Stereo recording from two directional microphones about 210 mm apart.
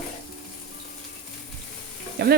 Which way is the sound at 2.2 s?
50° right (ahead or behind).